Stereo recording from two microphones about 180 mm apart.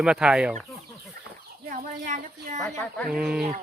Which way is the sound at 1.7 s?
45° right (ahead or behind).